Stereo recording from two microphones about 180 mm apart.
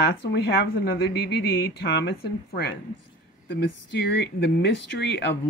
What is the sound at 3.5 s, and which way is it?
A woman's voice, 65° left (ahead or behind).